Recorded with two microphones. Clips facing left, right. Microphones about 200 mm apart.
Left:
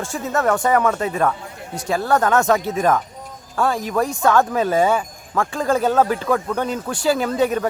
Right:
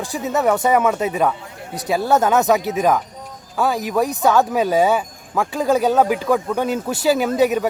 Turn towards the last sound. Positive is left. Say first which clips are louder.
# right 2 dB
turn(degrees=-5)  # may be behind; listen again after turning